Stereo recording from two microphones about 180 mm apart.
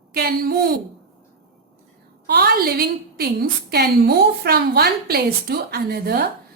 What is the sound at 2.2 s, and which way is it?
A woman's voice, 65° right (ahead or behind).